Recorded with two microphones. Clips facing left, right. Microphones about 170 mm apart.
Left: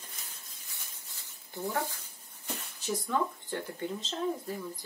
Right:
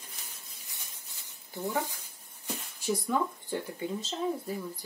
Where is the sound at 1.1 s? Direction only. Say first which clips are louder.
Right 1 dB; 15° right (ahead or behind).